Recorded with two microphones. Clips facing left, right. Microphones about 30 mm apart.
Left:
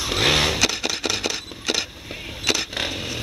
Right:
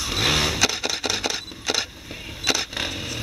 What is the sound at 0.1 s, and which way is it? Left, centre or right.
Vehicle, centre.